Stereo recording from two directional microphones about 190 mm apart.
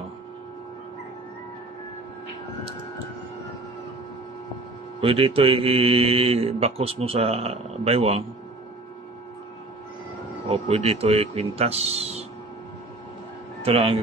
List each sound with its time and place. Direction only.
5.0 s speech: 30° right (ahead or behind)
10.5 s speech: 30° right (ahead or behind)
13.7 s speech: 30° right (ahead or behind)